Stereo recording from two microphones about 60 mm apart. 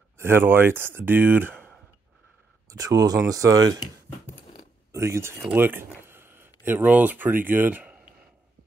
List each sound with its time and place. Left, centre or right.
0.2 s speech: right
2.7 s speech: right
3.3 s speech: right
4.9 s speech: right
5.5 s speech: right